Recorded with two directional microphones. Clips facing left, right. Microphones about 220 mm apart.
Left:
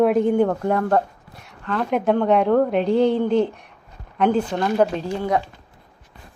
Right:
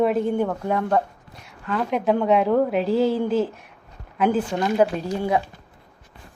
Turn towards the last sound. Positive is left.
turn(degrees=-15)  # may be behind; listen again after turning